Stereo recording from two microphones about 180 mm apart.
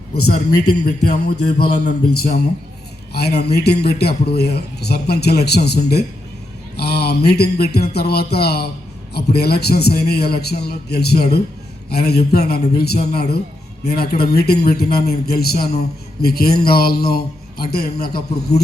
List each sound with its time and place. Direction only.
1.1 s a man's voice: 65° left (ahead or behind)
6.7 s a sound: 65° left (ahead or behind)
7.3 s a man's voice: 65° left (ahead or behind)